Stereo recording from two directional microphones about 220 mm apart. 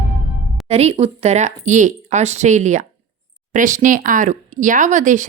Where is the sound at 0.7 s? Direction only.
30° right (ahead or behind).